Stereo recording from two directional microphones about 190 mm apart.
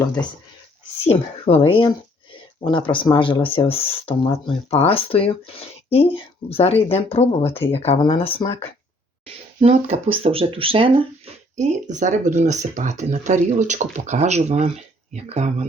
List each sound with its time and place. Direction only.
1.0 s speech: 30° left (ahead or behind)
9.6 s speech: 35° right (ahead or behind)